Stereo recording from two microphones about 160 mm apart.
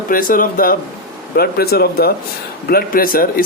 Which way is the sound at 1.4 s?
75° left (ahead or behind).